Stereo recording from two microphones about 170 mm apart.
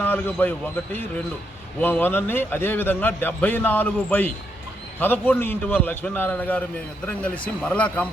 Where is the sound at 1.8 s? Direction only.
10° left (ahead or behind).